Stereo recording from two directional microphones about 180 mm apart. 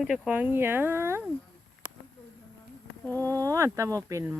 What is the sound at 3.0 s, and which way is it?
Speech, 10° left (ahead or behind).